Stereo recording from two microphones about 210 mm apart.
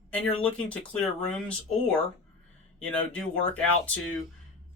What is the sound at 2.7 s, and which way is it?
Speech, 5° left (ahead or behind).